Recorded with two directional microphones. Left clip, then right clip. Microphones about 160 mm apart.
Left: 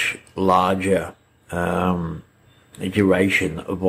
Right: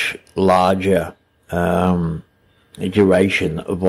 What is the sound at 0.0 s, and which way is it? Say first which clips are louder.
Speech: right 3 dB; 40° right (ahead or behind).